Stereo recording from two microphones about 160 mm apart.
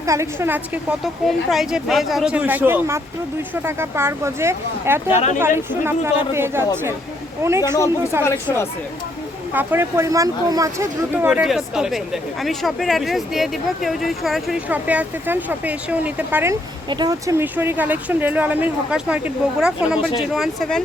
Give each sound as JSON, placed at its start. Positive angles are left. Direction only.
{"t": 0.0, "sound": "speech", "side_deg": -20}
{"t": 1.0, "sound": "speech", "side_deg": 0}
{"t": 5.0, "sound": "speech", "side_deg": 45}
{"t": 6.3, "sound": "speech", "side_deg": -15}
{"t": 8.2, "sound": "speech", "side_deg": 15}
{"t": 9.5, "sound": "speech", "side_deg": -10}
{"t": 16.9, "sound": "speech", "side_deg": -25}